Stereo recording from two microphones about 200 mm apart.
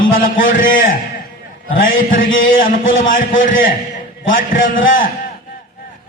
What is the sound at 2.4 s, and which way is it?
Speech, 45° left (ahead or behind).